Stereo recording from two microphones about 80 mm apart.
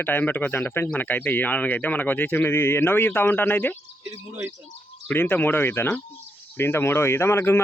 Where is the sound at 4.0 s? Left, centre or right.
Right.